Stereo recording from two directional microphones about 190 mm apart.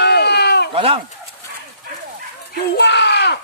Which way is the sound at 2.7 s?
60° left (ahead or behind).